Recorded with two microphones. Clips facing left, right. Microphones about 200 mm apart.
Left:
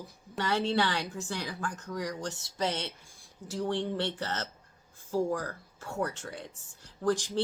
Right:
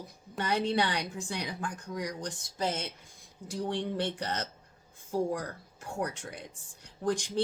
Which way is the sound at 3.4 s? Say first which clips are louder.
Left 2 dB; 15° right (ahead or behind).